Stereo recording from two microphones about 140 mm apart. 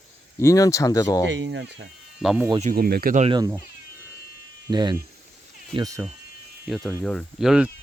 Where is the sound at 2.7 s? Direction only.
90° right.